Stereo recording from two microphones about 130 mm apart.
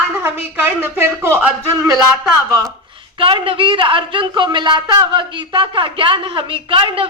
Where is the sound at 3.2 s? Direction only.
45° right (ahead or behind).